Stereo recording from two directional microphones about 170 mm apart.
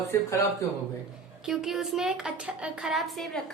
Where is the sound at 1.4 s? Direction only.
5° right (ahead or behind).